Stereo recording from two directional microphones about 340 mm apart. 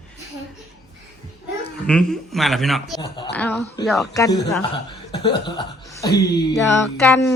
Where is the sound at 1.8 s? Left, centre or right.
Centre.